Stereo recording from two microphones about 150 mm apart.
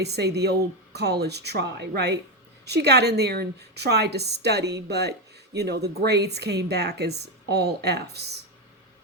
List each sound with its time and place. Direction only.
0.0 s a woman's voice: 90° right